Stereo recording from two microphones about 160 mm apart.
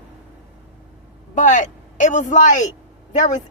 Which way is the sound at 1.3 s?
50° left (ahead or behind).